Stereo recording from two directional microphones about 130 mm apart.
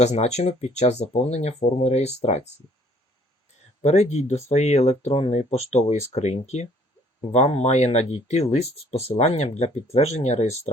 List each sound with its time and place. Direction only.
0.0 s speech: 55° left (ahead or behind)
3.8 s speech: 60° left (ahead or behind)